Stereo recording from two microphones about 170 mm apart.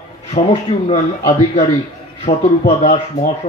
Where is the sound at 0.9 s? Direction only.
35° left (ahead or behind).